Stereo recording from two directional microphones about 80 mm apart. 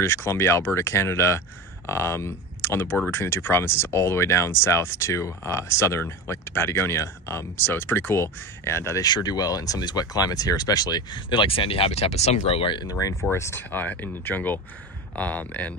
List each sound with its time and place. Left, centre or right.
0.0 s speech: left
9.0 s speech: left
12.8 s speech: left